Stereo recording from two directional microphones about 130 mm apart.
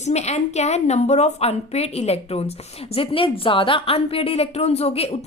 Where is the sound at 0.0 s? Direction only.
60° left (ahead or behind).